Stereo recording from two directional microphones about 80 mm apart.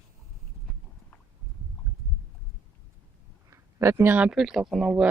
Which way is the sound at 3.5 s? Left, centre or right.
Right.